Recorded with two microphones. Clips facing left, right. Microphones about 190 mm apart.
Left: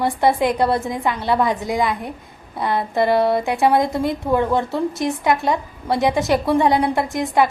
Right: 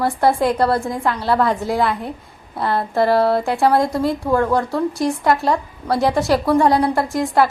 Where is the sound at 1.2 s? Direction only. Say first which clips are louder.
Right 2 dB; 20° left (ahead or behind).